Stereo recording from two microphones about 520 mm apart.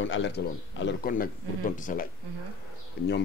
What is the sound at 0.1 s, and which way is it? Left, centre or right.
Speech, left.